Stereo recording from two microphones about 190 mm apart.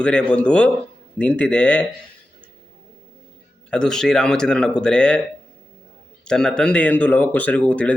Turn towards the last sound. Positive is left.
turn(degrees=5)  # may be behind; listen again after turning